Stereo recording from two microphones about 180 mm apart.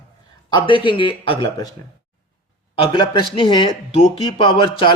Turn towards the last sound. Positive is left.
turn(degrees=30)  # may be behind; listen again after turning